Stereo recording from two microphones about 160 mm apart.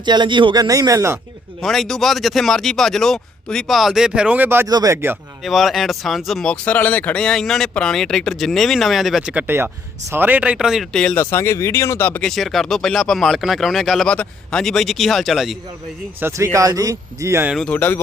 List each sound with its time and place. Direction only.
0.0 s speech: 30° right (ahead or behind)
1.6 s speech: centre (ahead or behind); by 5.1 s 15° right (ahead or behind)
5.4 s speech: centre (ahead or behind)
12.3 s speech: centre (ahead or behind)
16.2 s speech: 20° right (ahead or behind)
17.5 s speech: 5° left (ahead or behind)